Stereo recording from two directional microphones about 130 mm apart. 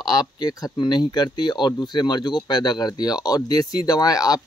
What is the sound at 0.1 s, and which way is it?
Speech, 30° left (ahead or behind).